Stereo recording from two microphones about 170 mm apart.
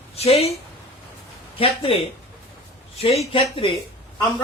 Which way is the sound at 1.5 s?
30° left (ahead or behind).